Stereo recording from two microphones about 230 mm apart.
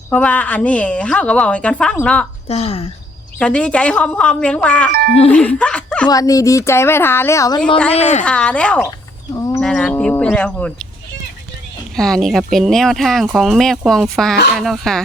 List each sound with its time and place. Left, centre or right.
0.1 s speech: centre
2.5 s speech: left
3.3 s speech: centre
6.1 s a woman's voice: centre
7.9 s speech: left
8.2 s speech: centre
9.3 s livestock: centre
9.6 s speech: centre
11.9 s speech: centre